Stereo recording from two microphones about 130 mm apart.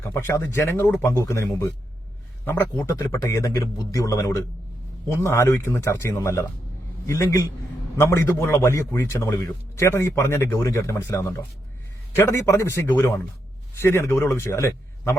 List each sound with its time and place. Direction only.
0.0 s a man's voice: 20° left (ahead or behind)